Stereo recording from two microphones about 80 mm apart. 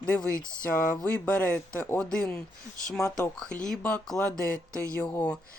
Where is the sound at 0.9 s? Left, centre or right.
Centre.